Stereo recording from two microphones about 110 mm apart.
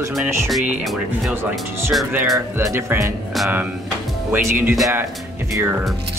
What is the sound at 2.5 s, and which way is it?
Speech, 25° right (ahead or behind).